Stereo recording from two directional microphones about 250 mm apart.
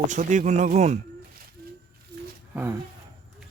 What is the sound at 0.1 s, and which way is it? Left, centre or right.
Speech, right.